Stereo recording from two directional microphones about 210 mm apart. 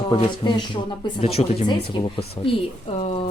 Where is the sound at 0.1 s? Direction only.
20° left (ahead or behind).